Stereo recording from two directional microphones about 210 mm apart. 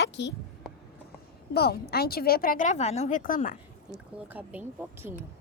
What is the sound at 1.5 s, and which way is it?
Speech, 50° left (ahead or behind).